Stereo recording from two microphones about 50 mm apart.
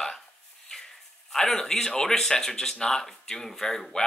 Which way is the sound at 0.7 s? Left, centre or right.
Centre.